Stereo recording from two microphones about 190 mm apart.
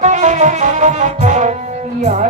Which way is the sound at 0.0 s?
40° right (ahead or behind).